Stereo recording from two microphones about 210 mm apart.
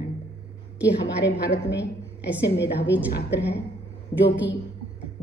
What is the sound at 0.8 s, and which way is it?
A woman's voice, 55° left (ahead or behind).